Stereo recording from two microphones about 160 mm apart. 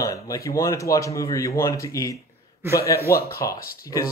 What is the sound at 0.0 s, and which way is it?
Speech, 20° left (ahead or behind).